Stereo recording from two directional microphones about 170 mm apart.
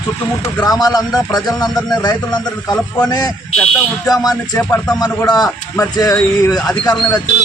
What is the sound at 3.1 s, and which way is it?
Speech, 20° left (ahead or behind).